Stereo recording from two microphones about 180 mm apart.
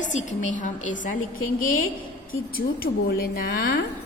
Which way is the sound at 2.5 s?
55° left (ahead or behind).